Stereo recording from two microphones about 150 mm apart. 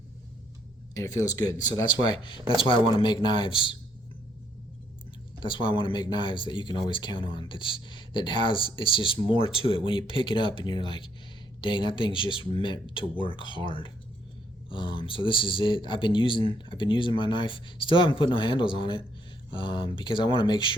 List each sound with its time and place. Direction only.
0.9 s speech: 25° left (ahead or behind)
5.4 s speech: 35° left (ahead or behind)